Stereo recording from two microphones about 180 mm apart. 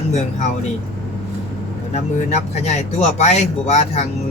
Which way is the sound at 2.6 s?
40° left (ahead or behind).